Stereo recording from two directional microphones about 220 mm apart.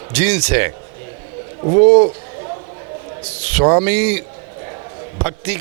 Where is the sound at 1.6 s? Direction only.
30° right (ahead or behind).